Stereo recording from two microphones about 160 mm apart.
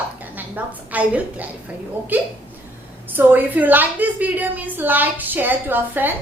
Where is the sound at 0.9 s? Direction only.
10° right (ahead or behind).